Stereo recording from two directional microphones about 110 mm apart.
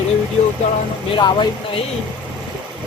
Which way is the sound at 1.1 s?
45° left (ahead or behind).